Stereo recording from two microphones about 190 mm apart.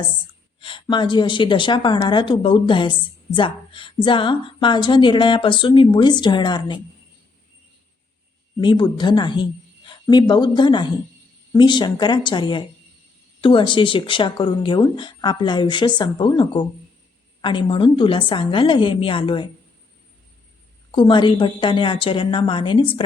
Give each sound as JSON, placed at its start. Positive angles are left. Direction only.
{"t": 0.6, "sound": "a woman's voice", "side_deg": 25}
{"t": 8.6, "sound": "a woman's voice", "side_deg": 25}
{"t": 20.9, "sound": "a woman's voice", "side_deg": 25}